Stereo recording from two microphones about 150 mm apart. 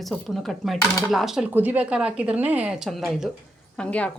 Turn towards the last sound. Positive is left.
turn(degrees=10)  # may be behind; listen again after turning